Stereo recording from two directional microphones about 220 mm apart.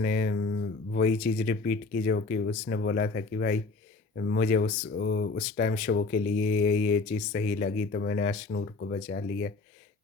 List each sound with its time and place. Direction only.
0.0 s speech: 40° left (ahead or behind)